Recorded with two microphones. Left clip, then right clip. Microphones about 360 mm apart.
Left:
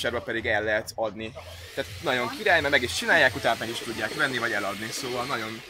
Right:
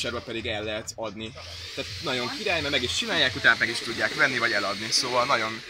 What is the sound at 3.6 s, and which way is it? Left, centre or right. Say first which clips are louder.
Speech: right 5 dB; centre.